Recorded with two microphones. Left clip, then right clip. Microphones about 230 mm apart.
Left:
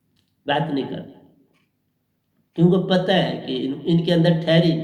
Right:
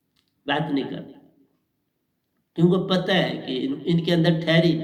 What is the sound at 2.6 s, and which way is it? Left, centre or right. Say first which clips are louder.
A man's voice: left 3 dB; right.